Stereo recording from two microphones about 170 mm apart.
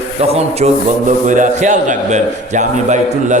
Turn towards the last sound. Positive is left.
turn(degrees=-45)  # may be behind; listen again after turning